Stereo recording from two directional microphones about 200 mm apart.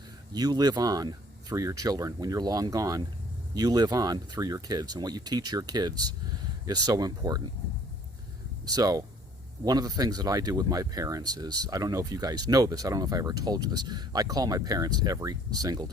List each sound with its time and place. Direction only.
0.3 s speech: 20° right (ahead or behind)
8.6 s speech: 20° right (ahead or behind)